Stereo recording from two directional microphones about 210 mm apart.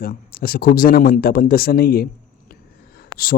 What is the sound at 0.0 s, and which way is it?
Speech, 45° left (ahead or behind).